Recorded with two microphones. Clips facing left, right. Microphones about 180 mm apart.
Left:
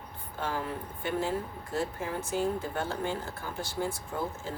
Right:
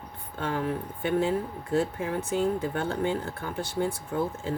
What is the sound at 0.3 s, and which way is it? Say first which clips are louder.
Speech: right 3 dB; 60° right (ahead or behind).